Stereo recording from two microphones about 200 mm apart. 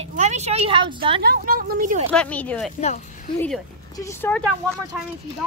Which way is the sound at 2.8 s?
35° left (ahead or behind).